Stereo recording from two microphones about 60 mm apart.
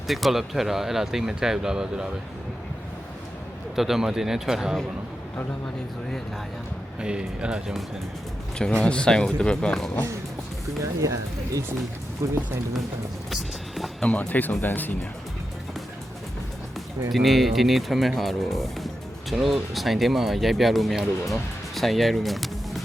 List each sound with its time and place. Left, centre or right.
0.1 s speech: centre
3.8 s speech: centre
7.0 s speech: centre
8.8 s speech: centre
11.0 s speech: right
12.2 s speech: right
13.3 s music: centre
14.0 s speech: left
17.1 s speech: centre